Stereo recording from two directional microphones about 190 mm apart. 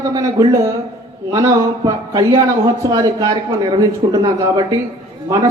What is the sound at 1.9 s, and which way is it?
Speech, 20° right (ahead or behind).